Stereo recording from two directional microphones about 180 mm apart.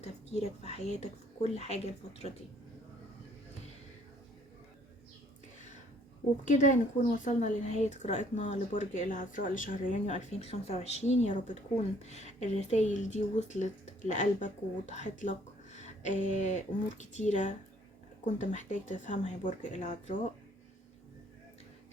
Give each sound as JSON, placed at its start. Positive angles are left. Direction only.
{"t": 0.0, "sound": "a woman's voice", "side_deg": 35}
{"t": 6.4, "sound": "a woman's voice", "side_deg": 45}